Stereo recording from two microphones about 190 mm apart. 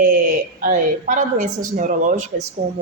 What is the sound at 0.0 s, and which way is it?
A woman's voice, 50° right (ahead or behind).